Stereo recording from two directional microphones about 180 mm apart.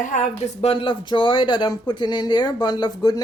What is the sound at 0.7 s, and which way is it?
Speech, 30° left (ahead or behind).